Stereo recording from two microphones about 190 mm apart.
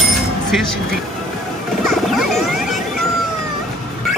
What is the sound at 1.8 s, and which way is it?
Music, centre (ahead or behind).